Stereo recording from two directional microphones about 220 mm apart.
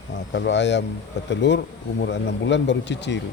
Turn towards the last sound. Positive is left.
turn(degrees=50)  # may be behind; listen again after turning